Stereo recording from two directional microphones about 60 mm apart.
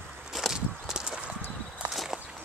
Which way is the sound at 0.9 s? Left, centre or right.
Centre.